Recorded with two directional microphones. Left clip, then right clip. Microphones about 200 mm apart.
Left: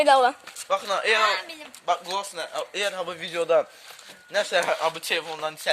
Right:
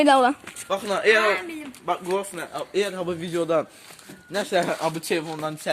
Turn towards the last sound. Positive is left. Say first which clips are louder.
# right 1 dB
turn(degrees=-10)  # may be behind; listen again after turning